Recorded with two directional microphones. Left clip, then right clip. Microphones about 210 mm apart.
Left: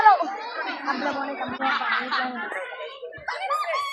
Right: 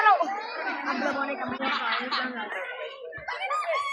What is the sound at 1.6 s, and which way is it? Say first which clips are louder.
Chatter: left 5 dB; 35° left (ahead or behind).